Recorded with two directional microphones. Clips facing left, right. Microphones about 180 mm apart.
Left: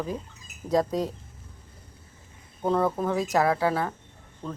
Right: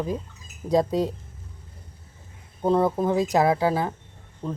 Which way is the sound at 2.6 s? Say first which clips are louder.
Right 3 dB; 15° right (ahead or behind).